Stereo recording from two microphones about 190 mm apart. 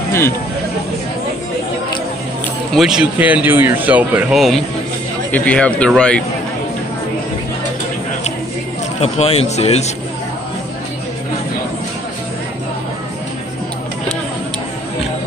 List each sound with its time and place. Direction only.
2.7 s speech: centre (ahead or behind)
9.0 s speech: 35° left (ahead or behind)